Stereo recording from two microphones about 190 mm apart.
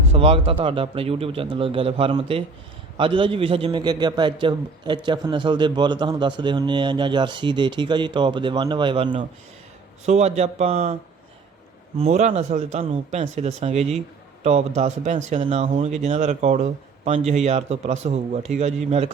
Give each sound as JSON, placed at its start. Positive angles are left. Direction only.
{"t": 0.1, "sound": "a man's voice", "side_deg": -30}
{"t": 11.9, "sound": "speech", "side_deg": -35}